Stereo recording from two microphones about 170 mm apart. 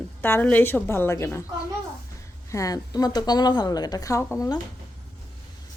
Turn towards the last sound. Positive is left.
turn(degrees=20)  # may be behind; listen again after turning